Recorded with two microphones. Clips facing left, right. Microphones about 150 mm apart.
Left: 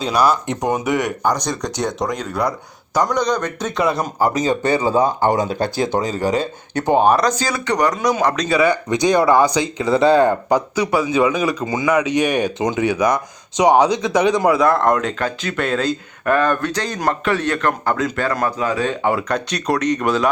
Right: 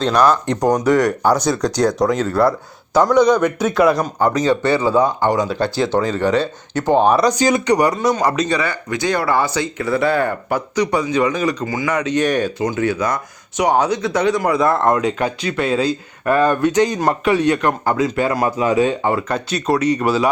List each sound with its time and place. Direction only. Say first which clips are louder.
0.0 s speech: right 2 dB; 10° left (ahead or behind)
4.3 s speech: right 3 dB; 15° left (ahead or behind)
5.5 s speech: right 2 dB; 45° left (ahead or behind)
7.0 s speech: even; centre (ahead or behind)
7.3 s speech: right 5 dB; 15° right (ahead or behind)
7.9 s speech: right 1 dB; centre (ahead or behind)
8.4 s speech: left 4 dB; 10° left (ahead or behind)
10.8 s speech: right 3 dB; 10° left (ahead or behind)
11.6 s speech: left 2 dB; 20° left (ahead or behind)
14.5 s speech: even; centre (ahead or behind)
19.0 s speech: even; centre (ahead or behind)